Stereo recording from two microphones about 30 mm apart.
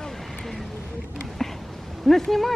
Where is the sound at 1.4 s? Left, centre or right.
Centre.